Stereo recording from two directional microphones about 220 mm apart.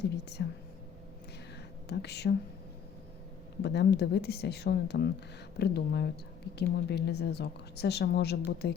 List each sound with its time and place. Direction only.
0.1 s a woman's voice: 50° left (ahead or behind)
1.9 s a woman's voice: 50° left (ahead or behind)
3.6 s a woman's voice: 50° left (ahead or behind)